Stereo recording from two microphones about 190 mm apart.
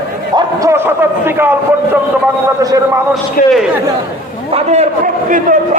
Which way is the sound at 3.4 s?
50° left (ahead or behind).